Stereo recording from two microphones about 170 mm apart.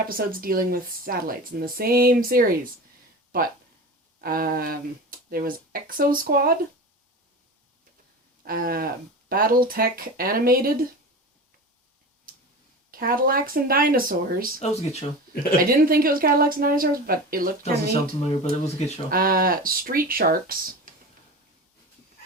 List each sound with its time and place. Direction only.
0.1 s speech: 55° right (ahead or behind)
4.2 s speech: 60° right (ahead or behind)
8.4 s speech: 60° right (ahead or behind)
12.9 s speech: 60° right (ahead or behind)
14.6 s speech: 40° left (ahead or behind)
15.7 s speech: 60° right (ahead or behind)